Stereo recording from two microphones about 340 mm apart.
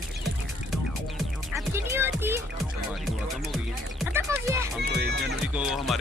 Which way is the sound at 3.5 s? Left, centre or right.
Centre.